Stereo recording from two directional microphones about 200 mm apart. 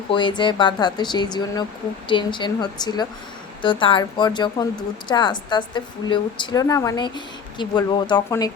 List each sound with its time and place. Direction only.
0.1 s a woman's voice: 25° left (ahead or behind)